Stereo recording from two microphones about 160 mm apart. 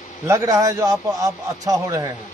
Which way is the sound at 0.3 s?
20° right (ahead or behind).